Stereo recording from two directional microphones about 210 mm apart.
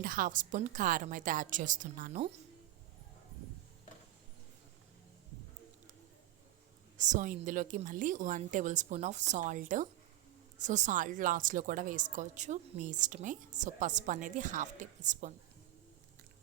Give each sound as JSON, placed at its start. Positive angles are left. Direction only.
{"t": 0.0, "sound": "speech", "side_deg": -40}
{"t": 6.9, "sound": "speech", "side_deg": -35}